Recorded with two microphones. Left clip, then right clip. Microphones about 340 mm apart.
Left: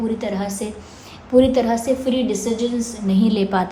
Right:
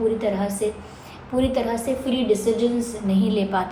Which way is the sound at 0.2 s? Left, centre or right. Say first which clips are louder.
Right 2 dB; left.